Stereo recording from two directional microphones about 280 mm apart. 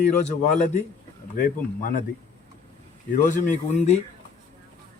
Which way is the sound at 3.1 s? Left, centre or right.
Left.